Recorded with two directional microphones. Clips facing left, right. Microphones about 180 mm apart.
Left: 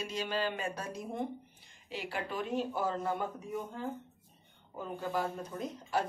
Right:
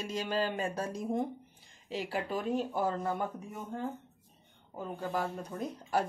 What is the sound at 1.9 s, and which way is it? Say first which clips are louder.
Speech: right 3 dB; 40° right (ahead or behind).